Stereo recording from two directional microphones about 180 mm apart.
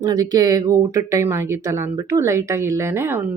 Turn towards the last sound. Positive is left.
turn(degrees=-15)  # may be behind; listen again after turning